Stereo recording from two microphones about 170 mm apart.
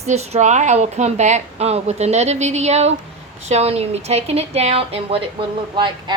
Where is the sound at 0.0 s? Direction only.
40° right (ahead or behind).